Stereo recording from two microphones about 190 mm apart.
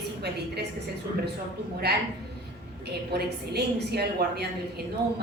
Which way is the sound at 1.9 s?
60° right (ahead or behind).